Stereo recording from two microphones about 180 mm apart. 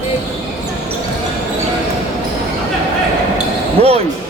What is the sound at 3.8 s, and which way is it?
Speech, 35° right (ahead or behind).